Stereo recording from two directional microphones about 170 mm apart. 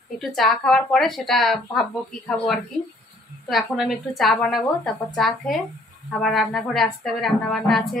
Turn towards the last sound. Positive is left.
turn(degrees=0)  # may be behind; listen again after turning